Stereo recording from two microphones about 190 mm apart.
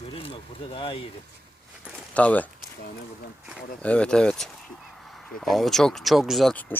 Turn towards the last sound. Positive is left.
turn(degrees=5)  # may be behind; listen again after turning